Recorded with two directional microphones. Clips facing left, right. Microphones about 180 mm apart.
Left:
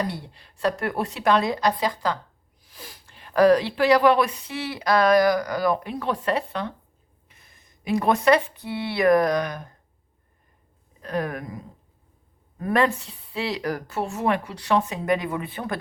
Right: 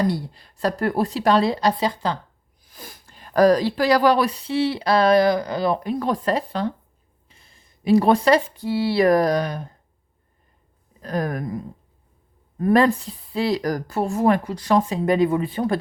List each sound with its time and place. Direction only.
0.1 s speech: 40° right (ahead or behind)
2.6 s speech: 45° right (ahead or behind); by 9.7 s 30° right (ahead or behind)
11.0 s speech: 40° right (ahead or behind)